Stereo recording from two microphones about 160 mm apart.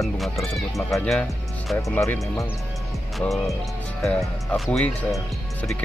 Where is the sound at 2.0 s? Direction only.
20° left (ahead or behind).